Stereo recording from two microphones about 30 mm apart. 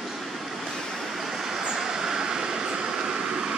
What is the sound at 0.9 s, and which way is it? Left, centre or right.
Vehicle, centre.